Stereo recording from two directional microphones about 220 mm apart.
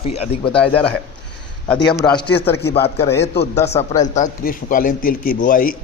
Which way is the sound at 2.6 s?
50° left (ahead or behind).